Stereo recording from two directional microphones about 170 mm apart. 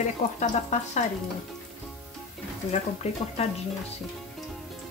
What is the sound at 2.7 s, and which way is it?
Speech, 40° left (ahead or behind).